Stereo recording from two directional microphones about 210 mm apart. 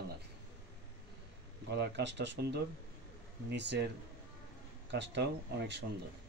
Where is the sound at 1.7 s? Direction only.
55° right (ahead or behind).